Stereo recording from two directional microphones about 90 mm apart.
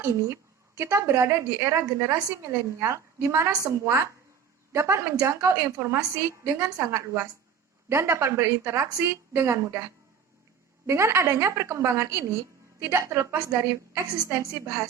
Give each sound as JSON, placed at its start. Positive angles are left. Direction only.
{"t": 0.0, "sound": "a woman's voice", "side_deg": -35}
{"t": 10.8, "sound": "a woman's voice", "side_deg": -30}